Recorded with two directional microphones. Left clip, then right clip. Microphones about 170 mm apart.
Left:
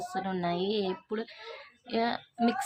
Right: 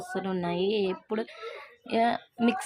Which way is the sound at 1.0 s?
25° right (ahead or behind).